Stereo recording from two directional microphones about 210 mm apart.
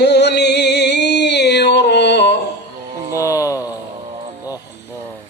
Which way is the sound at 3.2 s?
15° left (ahead or behind).